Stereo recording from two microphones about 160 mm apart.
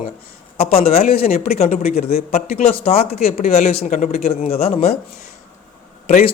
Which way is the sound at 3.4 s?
65° left (ahead or behind).